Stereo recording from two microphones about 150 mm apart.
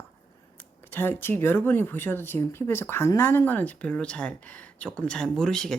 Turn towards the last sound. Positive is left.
turn(degrees=5)  # may be behind; listen again after turning